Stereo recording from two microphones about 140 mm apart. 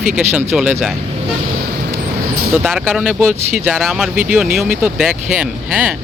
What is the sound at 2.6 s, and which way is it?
Speech, 5° right (ahead or behind).